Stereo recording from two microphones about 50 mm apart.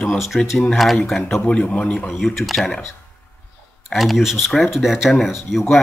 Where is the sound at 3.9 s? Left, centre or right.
Centre.